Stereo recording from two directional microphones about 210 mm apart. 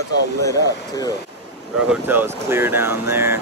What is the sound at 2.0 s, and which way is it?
Speech, 10° right (ahead or behind).